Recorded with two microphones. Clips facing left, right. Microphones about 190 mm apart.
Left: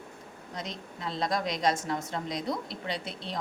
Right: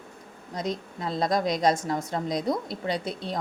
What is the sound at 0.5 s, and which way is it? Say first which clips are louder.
A woman's voice: right 8 dB; 40° right (ahead or behind).